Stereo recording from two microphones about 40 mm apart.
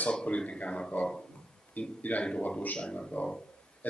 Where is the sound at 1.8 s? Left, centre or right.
Left.